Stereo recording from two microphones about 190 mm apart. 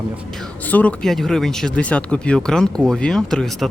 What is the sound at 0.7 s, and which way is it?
Speech, 10° left (ahead or behind).